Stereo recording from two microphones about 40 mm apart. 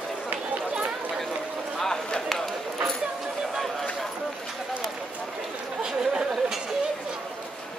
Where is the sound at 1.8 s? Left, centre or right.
Centre.